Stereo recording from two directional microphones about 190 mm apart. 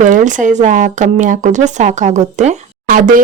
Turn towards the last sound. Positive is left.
turn(degrees=-45)  # may be behind; listen again after turning